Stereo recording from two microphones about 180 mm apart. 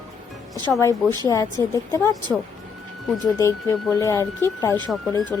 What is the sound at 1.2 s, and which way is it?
Speech, 20° left (ahead or behind).